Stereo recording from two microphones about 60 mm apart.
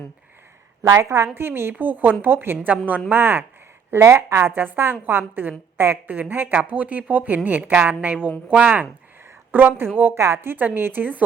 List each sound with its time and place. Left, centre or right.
0.8 s a woman's voice: right
1.8 s a woman's voice: right
3.9 s a woman's voice: right
6.1 s a woman's voice: right
10.2 s a woman's voice: right